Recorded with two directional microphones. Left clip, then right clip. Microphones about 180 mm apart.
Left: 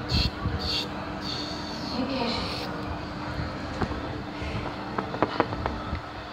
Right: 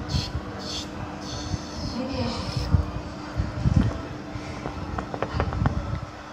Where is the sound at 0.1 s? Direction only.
30° left (ahead or behind).